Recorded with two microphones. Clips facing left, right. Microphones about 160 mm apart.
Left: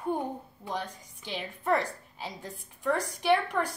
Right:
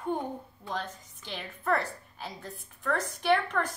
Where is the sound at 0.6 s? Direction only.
15° left (ahead or behind).